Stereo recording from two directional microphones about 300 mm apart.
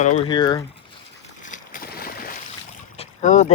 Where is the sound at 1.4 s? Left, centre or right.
Left.